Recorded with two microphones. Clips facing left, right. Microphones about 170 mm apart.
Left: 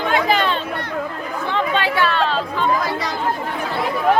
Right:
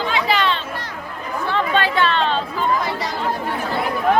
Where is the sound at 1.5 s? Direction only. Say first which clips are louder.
Right 1 dB; 15° left (ahead or behind).